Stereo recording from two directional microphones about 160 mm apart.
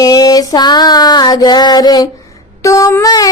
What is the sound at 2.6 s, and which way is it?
Child singing, 20° left (ahead or behind).